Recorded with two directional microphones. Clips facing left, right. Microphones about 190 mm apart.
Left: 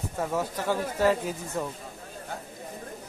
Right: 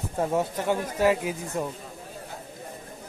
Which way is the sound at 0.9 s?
10° right (ahead or behind).